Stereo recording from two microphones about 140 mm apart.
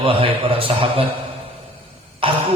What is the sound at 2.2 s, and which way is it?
Speech, 40° right (ahead or behind).